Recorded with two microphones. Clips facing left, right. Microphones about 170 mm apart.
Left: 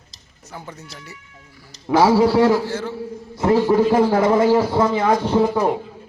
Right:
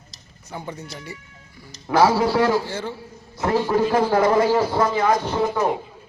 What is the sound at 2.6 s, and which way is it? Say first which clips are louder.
Speech: left 4 dB; centre (ahead or behind).